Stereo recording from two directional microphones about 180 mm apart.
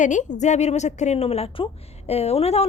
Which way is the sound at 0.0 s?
45° left (ahead or behind).